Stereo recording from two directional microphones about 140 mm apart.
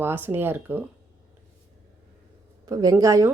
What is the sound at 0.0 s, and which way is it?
Speech, 15° right (ahead or behind).